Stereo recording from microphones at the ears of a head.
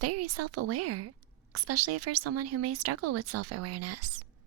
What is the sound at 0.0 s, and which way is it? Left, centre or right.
Speech, right.